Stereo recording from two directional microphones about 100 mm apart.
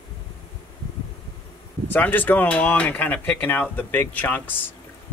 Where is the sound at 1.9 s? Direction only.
20° left (ahead or behind).